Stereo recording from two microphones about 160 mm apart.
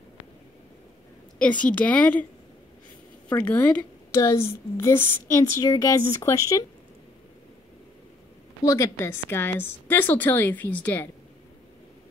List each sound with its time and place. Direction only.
1.4 s a woman's voice: 10° left (ahead or behind)
3.3 s a woman's voice: 10° left (ahead or behind)
8.6 s a woman's voice: 20° left (ahead or behind)